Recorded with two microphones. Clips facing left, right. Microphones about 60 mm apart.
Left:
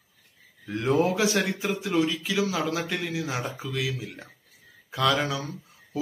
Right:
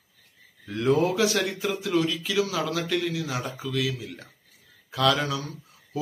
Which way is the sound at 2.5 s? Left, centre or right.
Left.